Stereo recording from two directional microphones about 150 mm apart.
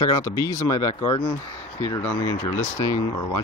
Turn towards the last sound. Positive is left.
turn(degrees=25)  # may be behind; listen again after turning